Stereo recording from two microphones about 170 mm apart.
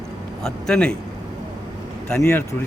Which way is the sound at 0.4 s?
5° left (ahead or behind).